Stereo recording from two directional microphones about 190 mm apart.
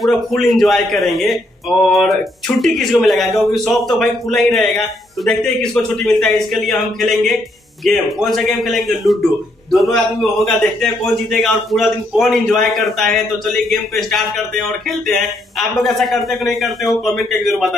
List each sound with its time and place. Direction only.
0.0 s a man's voice: centre (ahead or behind)